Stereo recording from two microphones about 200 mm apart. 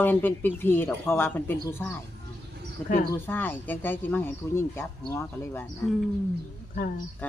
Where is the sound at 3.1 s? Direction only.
10° left (ahead or behind).